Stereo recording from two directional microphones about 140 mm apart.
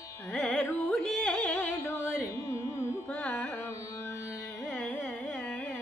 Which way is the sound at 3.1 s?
10° left (ahead or behind).